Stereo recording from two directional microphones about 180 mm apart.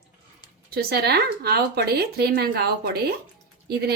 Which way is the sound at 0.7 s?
60° right (ahead or behind).